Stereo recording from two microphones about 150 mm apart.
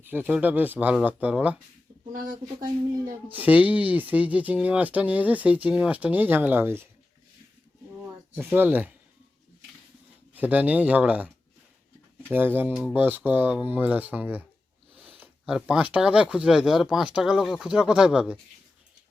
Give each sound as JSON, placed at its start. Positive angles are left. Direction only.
{"t": 0.0, "sound": "speech", "side_deg": -15}
{"t": 2.1, "sound": "speech", "side_deg": -65}
{"t": 3.3, "sound": "speech", "side_deg": -10}
{"t": 8.4, "sound": "speech", "side_deg": -10}
{"t": 10.3, "sound": "speech", "side_deg": -10}
{"t": 12.3, "sound": "speech", "side_deg": -15}